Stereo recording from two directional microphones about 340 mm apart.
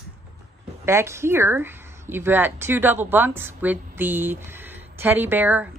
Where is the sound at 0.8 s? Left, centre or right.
Centre.